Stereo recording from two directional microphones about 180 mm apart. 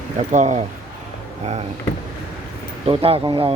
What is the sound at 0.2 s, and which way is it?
Speech, 40° right (ahead or behind).